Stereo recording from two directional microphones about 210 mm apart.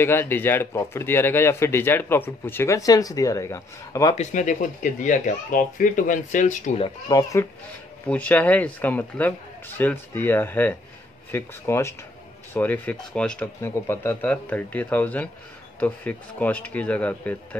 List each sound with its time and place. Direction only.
0.0 s speech: 10° left (ahead or behind)
4.1 s speech: 35° left (ahead or behind)
7.1 s speech: 15° left (ahead or behind)
8.1 s speech: 5° left (ahead or behind)